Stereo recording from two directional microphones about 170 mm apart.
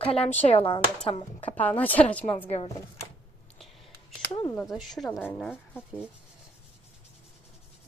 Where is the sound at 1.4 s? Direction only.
10° left (ahead or behind).